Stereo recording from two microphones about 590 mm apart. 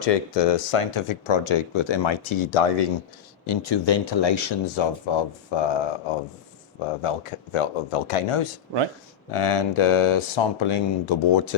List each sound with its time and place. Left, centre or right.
0.0 s speech: left
3.4 s speech: left
7.0 s speech: left